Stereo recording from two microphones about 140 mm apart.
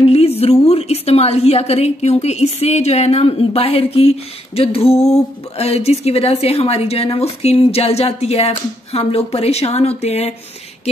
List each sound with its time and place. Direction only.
0.0 s a woman's voice: 45° left (ahead or behind)